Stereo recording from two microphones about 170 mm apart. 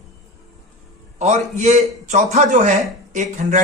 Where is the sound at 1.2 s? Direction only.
45° right (ahead or behind).